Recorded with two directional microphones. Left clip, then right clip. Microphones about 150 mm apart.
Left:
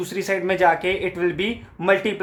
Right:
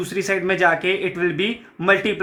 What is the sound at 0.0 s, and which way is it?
Speech, 35° left (ahead or behind).